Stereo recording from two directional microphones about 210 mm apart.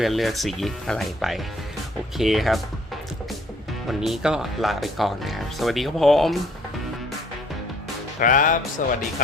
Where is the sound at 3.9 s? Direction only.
Centre (ahead or behind).